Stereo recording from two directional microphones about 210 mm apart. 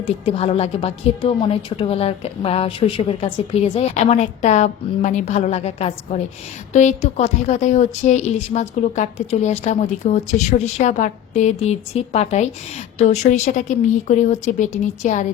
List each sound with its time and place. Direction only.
0.0 s a woman's voice: 30° left (ahead or behind)